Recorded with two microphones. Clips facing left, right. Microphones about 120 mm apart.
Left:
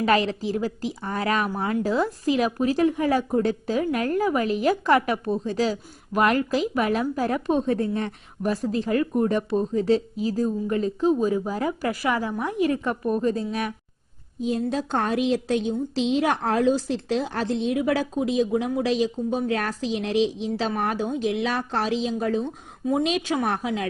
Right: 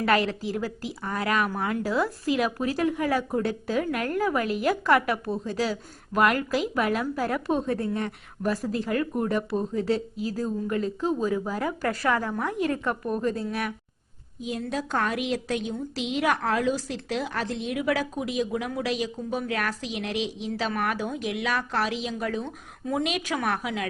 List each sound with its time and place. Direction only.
0.0 s a woman's voice: 20° left (ahead or behind)
8.4 s a woman's voice: 10° left (ahead or behind)
9.2 s a woman's voice: 25° left (ahead or behind)